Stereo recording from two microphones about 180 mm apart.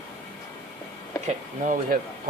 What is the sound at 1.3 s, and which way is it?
Speech, 45° right (ahead or behind).